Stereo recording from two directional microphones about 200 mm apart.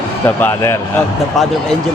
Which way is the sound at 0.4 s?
15° left (ahead or behind).